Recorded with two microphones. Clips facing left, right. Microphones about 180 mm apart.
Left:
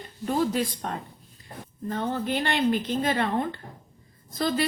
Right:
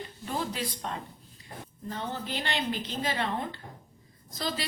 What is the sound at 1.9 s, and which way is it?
A woman's voice, 55° left (ahead or behind).